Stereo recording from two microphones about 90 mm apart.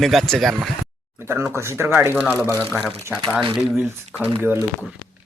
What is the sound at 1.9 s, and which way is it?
Speech, 20° right (ahead or behind).